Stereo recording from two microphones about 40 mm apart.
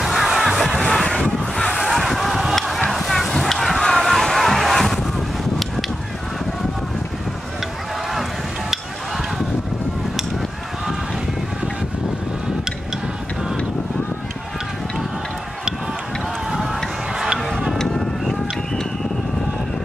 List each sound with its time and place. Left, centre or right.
0.0 s music: centre
0.8 s vehicle: centre
1.4 s a sound: centre
8.1 s a sound: centre
16.5 s run: centre
17.7 s boat: centre